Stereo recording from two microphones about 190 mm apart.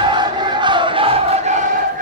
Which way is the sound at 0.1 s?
25° right (ahead or behind).